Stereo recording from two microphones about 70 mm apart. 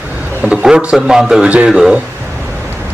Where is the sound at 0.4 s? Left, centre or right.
Centre.